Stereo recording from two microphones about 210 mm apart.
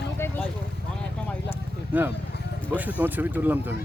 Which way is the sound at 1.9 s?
10° right (ahead or behind).